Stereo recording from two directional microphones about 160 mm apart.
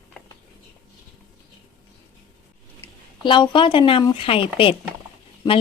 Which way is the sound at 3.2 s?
30° left (ahead or behind).